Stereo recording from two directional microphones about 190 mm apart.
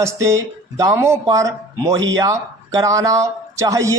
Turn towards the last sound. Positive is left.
turn(degrees=-15)  # may be behind; listen again after turning